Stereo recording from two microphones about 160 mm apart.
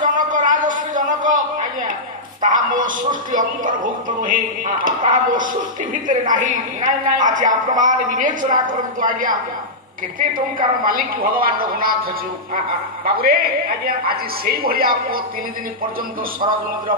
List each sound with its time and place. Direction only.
0.0 s a sound: 55° right (ahead or behind)
2.4 s a woman's voice: 55° right (ahead or behind)
13.1 s a man's voice: 70° right (ahead or behind)